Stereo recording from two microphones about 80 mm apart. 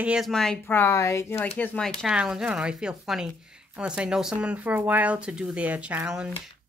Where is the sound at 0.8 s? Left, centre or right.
Left.